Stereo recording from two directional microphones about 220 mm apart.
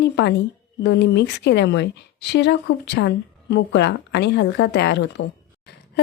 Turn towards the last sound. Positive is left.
turn(degrees=50)  # may be behind; listen again after turning